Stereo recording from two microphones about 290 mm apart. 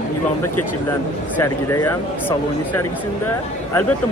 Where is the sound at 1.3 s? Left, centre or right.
Centre.